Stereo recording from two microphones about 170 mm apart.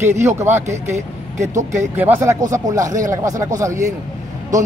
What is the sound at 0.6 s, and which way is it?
Speech, 40° right (ahead or behind).